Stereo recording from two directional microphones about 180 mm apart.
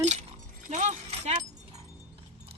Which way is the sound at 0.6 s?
40° right (ahead or behind).